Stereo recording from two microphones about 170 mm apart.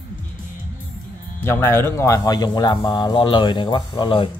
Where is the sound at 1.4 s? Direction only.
15° left (ahead or behind); by 4.3 s 30° left (ahead or behind).